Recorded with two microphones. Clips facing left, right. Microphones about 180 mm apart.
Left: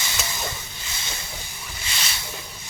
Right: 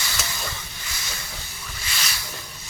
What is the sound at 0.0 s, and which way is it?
Hiss, 20° left (ahead or behind).